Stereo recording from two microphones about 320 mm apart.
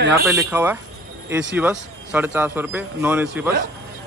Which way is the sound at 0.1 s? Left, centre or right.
Centre.